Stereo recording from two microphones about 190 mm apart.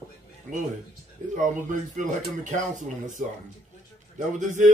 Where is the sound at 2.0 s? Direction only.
40° right (ahead or behind).